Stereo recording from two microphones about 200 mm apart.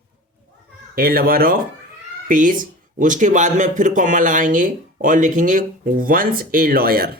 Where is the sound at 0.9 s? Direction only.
50° right (ahead or behind).